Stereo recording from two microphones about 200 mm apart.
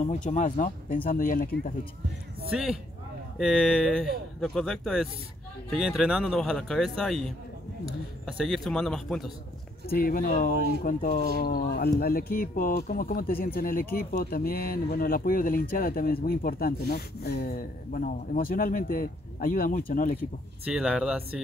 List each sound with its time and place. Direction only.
0.0 s speech: 35° left (ahead or behind)
2.5 s speech: centre (ahead or behind)
9.8 s speech: 45° left (ahead or behind)
20.6 s speech: 5° right (ahead or behind)